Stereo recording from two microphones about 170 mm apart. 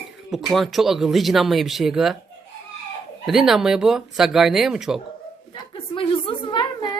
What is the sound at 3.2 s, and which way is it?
Speech, centre (ahead or behind).